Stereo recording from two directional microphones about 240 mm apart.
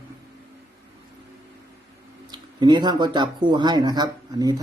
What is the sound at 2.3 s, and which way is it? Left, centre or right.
Speech, centre.